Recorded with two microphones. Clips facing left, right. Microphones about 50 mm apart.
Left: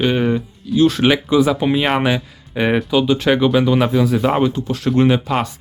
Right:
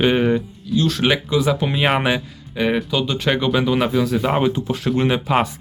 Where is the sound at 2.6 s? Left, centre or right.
Centre.